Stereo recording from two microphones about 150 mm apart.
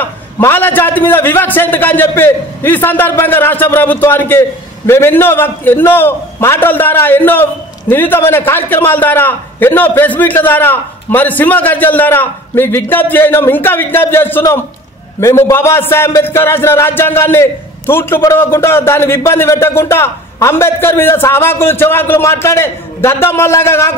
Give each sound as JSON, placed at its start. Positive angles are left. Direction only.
{"t": 0.0, "sound": "a man's voice", "side_deg": 15}